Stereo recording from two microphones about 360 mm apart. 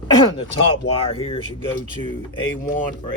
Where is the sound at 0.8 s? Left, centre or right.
Centre.